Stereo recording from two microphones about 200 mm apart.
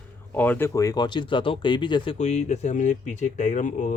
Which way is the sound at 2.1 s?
35° left (ahead or behind).